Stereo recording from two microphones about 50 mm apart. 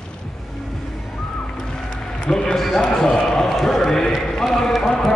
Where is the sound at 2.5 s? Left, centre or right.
Centre.